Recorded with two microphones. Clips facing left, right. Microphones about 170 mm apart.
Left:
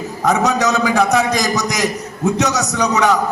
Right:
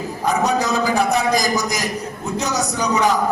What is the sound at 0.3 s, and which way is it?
A man's voice, 85° left.